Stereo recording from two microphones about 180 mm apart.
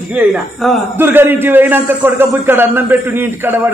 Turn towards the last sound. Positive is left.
turn(degrees=-10)  # may be behind; listen again after turning